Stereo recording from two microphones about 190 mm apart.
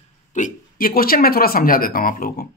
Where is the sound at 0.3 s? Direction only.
45° left (ahead or behind).